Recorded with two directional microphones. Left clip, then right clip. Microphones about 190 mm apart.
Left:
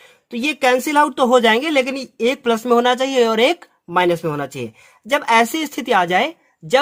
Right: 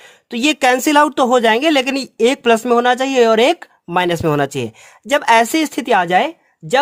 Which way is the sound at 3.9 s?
40° right (ahead or behind).